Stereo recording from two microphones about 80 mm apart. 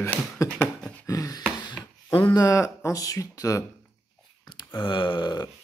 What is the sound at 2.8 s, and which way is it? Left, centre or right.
Speech, left.